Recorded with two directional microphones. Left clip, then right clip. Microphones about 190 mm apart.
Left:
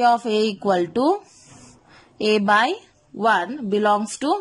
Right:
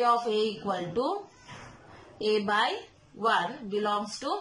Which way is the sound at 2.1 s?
60° left (ahead or behind).